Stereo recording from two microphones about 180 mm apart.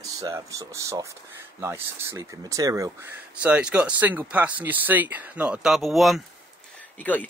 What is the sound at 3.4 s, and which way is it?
Speech, 5° right (ahead or behind).